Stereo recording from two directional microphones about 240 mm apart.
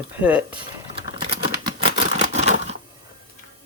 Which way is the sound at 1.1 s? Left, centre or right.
Centre.